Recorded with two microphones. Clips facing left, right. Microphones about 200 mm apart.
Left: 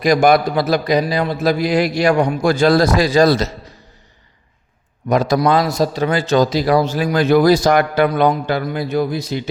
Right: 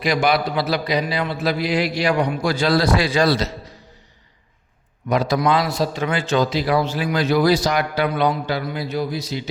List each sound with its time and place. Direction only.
0.0 s a man's voice: 45° left (ahead or behind)
5.0 s a man's voice: 45° left (ahead or behind)